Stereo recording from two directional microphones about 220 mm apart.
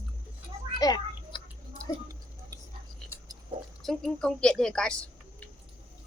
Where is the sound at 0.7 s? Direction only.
20° left (ahead or behind).